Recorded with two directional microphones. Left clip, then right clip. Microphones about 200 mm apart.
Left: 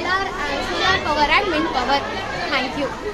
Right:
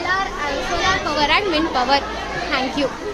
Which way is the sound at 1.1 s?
25° right (ahead or behind).